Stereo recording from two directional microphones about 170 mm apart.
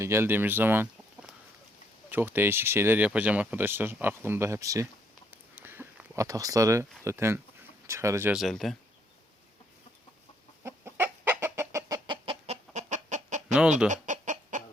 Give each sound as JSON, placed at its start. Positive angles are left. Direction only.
{"t": 0.0, "sound": "speech", "side_deg": -15}
{"t": 2.0, "sound": "speech", "side_deg": -10}
{"t": 5.3, "sound": "a sound", "side_deg": -10}
{"t": 7.9, "sound": "speech", "side_deg": -15}
{"t": 8.3, "sound": "speech", "side_deg": 0}
{"t": 10.6, "sound": "chicken", "side_deg": -15}